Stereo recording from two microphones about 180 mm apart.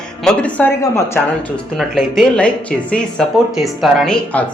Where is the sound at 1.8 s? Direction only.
Centre (ahead or behind).